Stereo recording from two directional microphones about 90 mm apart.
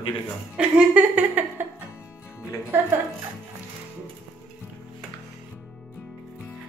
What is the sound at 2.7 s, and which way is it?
Speech, 25° right (ahead or behind).